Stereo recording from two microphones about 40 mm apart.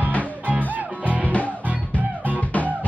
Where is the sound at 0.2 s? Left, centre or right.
Right.